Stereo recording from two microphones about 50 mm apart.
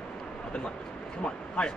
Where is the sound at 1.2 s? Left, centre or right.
Left.